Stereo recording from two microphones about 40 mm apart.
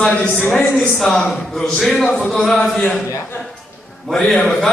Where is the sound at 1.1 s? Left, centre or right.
Centre.